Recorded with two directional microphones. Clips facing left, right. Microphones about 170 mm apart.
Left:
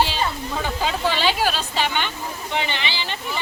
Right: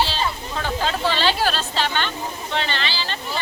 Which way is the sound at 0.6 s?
10° left (ahead or behind).